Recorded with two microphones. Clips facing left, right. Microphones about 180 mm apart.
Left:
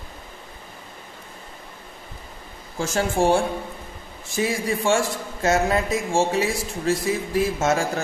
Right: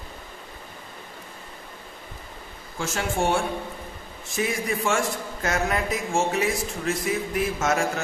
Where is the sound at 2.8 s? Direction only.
35° left (ahead or behind).